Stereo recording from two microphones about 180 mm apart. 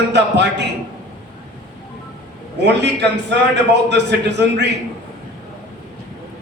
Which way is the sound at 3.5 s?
70° right (ahead or behind).